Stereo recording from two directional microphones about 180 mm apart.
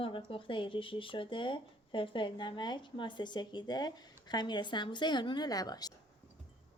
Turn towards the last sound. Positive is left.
turn(degrees=20)  # may be behind; listen again after turning